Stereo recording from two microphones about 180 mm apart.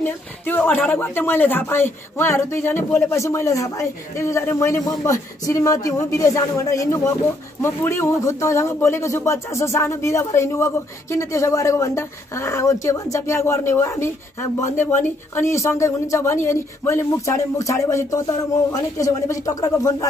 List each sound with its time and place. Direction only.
0.5 s speech: 10° left (ahead or behind)